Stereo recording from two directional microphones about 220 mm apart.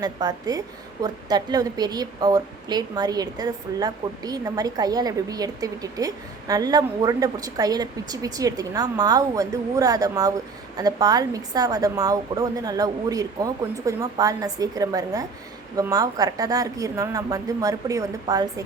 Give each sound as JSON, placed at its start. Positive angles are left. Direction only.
{"t": 0.0, "sound": "a woman's voice", "side_deg": -15}